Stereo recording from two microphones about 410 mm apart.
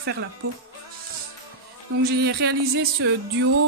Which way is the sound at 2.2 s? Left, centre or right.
Right.